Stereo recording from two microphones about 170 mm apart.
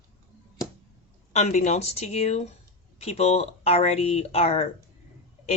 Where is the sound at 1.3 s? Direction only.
45° left (ahead or behind).